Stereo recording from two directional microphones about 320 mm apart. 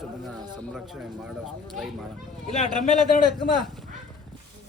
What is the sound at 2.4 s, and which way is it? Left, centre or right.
Speech, centre.